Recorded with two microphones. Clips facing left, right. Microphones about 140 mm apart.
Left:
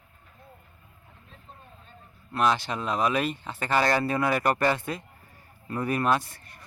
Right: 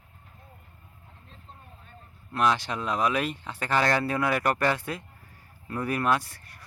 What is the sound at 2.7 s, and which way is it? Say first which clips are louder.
Speech: left 1 dB; centre (ahead or behind).